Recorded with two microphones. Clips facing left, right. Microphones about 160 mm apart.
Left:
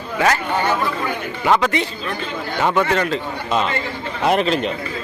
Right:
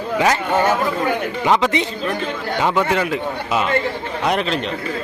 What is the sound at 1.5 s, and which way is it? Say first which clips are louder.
A man's voice: even; 20° right (ahead or behind).